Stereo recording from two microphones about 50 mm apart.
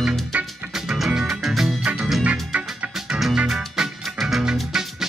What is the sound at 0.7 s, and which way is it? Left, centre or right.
Music, centre.